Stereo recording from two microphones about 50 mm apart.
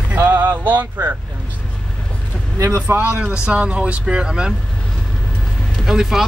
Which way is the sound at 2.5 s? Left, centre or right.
Right.